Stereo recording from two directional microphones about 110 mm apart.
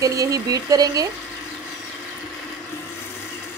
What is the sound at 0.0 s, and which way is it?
Speech, 30° right (ahead or behind).